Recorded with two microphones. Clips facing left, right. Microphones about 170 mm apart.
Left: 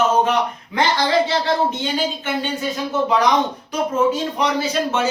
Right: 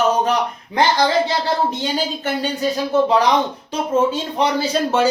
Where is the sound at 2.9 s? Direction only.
35° right (ahead or behind).